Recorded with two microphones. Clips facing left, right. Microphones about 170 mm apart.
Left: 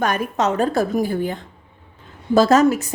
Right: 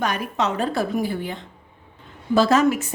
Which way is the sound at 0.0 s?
45° left (ahead or behind).